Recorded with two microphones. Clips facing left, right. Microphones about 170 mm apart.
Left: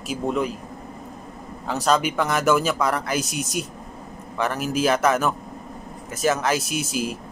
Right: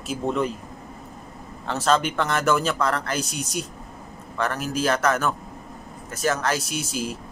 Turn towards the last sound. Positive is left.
turn(degrees=15)  # may be behind; listen again after turning